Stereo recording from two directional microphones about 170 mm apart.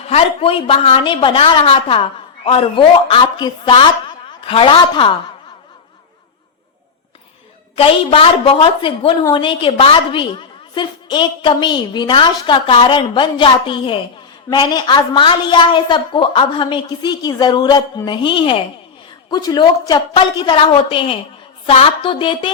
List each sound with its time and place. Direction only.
0.1 s a woman's voice: 35° left (ahead or behind)
7.8 s a woman's voice: 35° left (ahead or behind)